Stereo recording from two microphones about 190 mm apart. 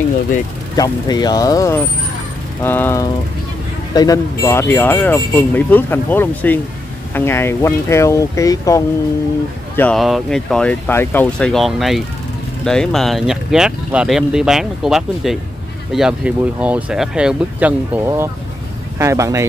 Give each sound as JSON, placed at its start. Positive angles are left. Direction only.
{"t": 0.7, "sound": "speech", "side_deg": 20}
{"t": 9.8, "sound": "speech", "side_deg": 5}